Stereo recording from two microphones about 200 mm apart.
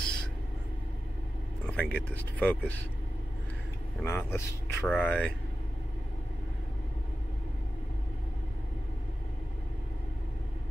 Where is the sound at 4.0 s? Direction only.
10° left (ahead or behind).